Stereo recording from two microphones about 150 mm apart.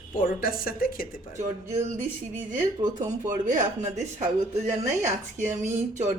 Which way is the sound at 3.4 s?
55° right (ahead or behind).